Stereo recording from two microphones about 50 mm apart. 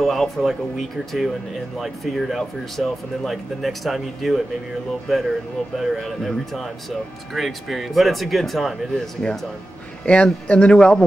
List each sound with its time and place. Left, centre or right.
0.0 s speech: centre
10.0 s speech: left